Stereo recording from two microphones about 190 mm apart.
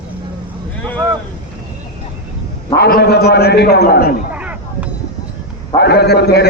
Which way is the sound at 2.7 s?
60° left (ahead or behind).